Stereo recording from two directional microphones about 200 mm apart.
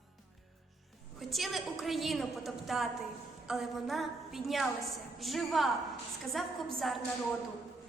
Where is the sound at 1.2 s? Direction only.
Centre (ahead or behind).